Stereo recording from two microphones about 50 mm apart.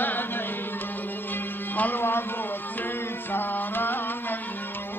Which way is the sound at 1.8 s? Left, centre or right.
Left.